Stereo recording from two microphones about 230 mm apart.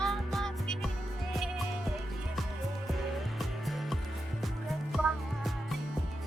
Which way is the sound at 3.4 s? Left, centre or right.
Centre.